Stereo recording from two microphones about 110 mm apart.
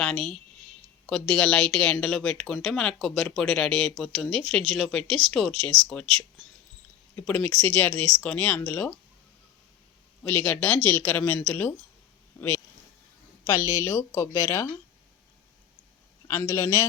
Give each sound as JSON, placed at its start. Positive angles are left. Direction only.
{"t": 0.0, "sound": "a woman's voice", "side_deg": 5}
{"t": 7.2, "sound": "speech", "side_deg": 10}
{"t": 10.2, "sound": "speech", "side_deg": 15}
{"t": 12.4, "sound": "speech", "side_deg": 30}
{"t": 16.2, "sound": "a man's voice", "side_deg": 25}